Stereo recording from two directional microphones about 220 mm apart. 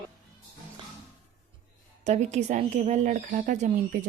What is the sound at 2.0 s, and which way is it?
A woman's voice, 30° right (ahead or behind).